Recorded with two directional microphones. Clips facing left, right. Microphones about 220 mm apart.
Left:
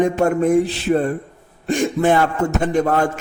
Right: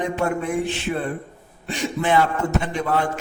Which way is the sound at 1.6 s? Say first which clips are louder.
Left 7 dB; 45° left (ahead or behind).